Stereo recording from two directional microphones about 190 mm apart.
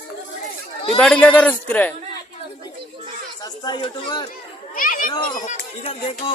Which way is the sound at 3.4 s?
25° left (ahead or behind).